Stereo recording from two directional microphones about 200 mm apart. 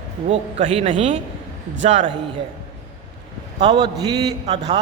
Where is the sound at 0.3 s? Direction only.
30° right (ahead or behind).